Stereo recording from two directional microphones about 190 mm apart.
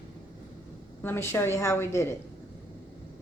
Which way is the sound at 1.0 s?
10° left (ahead or behind).